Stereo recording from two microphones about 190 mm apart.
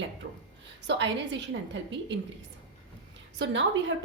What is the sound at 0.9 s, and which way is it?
A woman's voice, 65° right (ahead or behind).